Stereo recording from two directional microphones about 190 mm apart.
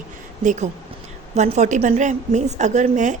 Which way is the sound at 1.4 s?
35° right (ahead or behind).